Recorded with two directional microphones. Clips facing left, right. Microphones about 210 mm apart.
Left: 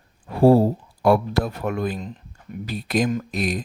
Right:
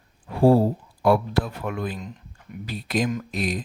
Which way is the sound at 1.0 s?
45° left (ahead or behind).